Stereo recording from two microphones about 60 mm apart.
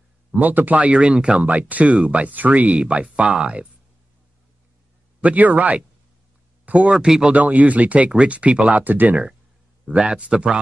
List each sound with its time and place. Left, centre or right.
0.4 s speech: right
5.2 s speech: right
7.3 s speech: right
9.8 s speech: centre